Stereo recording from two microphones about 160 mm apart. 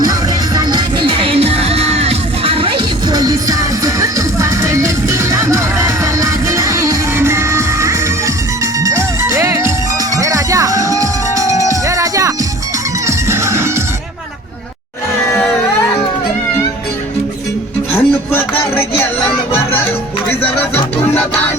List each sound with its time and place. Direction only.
0.0 s music: 25° right (ahead or behind)
17.9 s music: 15° left (ahead or behind)